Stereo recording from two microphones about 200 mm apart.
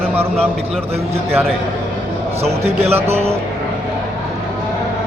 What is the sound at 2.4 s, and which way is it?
Speech, 30° right (ahead or behind).